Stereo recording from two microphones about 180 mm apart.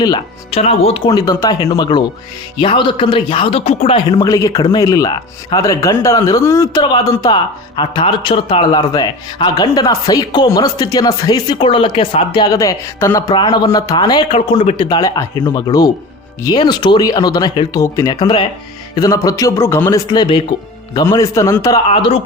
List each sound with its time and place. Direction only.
0.0 s speech: 25° left (ahead or behind)
0.6 s a man's voice: 35° left (ahead or behind)